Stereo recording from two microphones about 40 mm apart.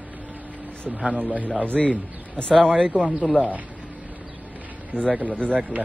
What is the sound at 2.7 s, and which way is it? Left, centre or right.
Speech, right.